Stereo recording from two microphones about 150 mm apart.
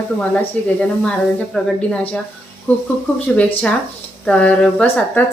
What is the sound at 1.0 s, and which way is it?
A woman's voice, 5° left (ahead or behind).